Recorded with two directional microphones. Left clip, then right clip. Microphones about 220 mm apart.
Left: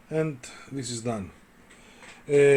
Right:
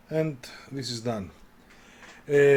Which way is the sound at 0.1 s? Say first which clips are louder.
Even; centre (ahead or behind).